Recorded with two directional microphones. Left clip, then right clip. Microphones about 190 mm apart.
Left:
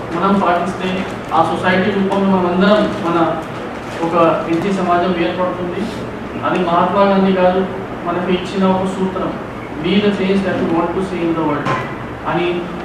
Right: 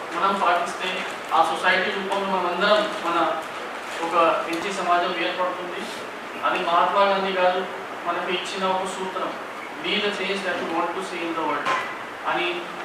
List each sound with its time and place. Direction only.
0.2 s speech: 10° left (ahead or behind)
1.4 s a man's voice: 40° left (ahead or behind)
1.6 s speech: 10° left (ahead or behind)
8.7 s speech: 40° left (ahead or behind)
9.8 s speech: 10° left (ahead or behind)